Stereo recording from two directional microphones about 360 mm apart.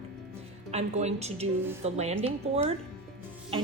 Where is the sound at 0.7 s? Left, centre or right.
Centre.